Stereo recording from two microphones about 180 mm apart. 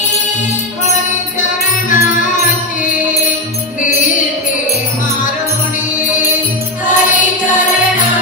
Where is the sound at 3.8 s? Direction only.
45° left (ahead or behind).